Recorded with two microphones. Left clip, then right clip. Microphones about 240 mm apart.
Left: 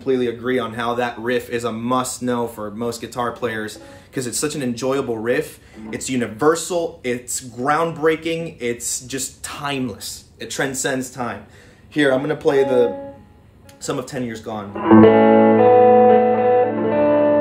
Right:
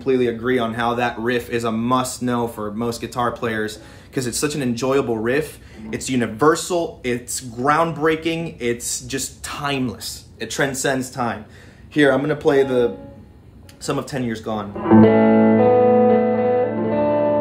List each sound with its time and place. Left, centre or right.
0.0 s speech: centre
14.8 s music: left